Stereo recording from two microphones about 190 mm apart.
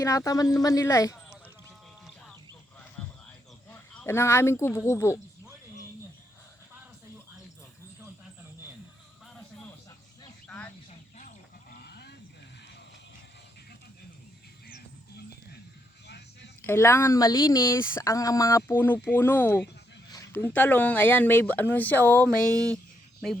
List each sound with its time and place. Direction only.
0.0 s speech: 15° left (ahead or behind)
3.7 s speech: 10° left (ahead or behind)
11.2 s livestock: 45° left (ahead or behind)
16.0 s a sound: 60° left (ahead or behind)
16.6 s speech: 10° left (ahead or behind)